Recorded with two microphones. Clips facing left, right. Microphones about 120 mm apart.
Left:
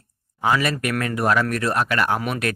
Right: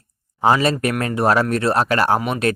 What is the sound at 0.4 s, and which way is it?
Speech, 30° right (ahead or behind).